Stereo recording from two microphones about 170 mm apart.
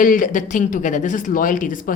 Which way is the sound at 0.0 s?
50° left (ahead or behind).